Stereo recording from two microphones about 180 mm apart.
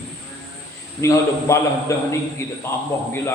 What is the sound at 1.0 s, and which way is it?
A man's voice, 15° left (ahead or behind).